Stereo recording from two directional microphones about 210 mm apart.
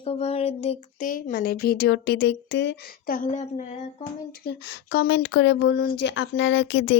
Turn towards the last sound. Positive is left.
turn(degrees=60)  # may be behind; listen again after turning